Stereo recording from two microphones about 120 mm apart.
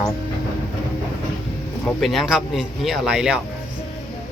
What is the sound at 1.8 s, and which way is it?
Speech, centre (ahead or behind).